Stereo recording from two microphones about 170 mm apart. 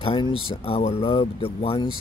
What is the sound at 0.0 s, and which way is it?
Mantra, 30° left (ahead or behind).